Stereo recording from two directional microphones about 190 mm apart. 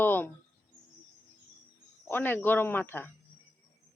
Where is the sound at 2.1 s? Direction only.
10° left (ahead or behind).